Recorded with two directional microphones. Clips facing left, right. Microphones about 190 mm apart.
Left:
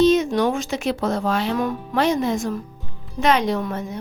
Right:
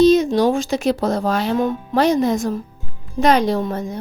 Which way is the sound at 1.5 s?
25° right (ahead or behind).